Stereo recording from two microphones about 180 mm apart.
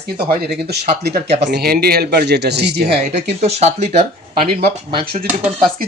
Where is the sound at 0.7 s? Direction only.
65° right (ahead or behind).